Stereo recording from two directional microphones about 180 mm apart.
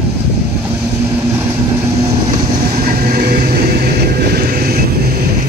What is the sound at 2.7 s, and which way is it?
Vehicle, 55° right (ahead or behind).